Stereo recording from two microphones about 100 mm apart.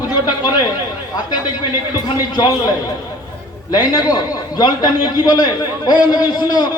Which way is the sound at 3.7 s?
40° left (ahead or behind).